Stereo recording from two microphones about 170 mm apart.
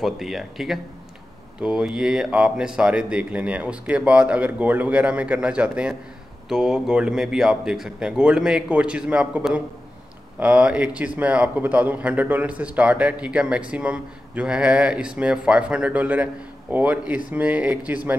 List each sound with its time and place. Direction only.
0.0 s a man's voice: centre (ahead or behind)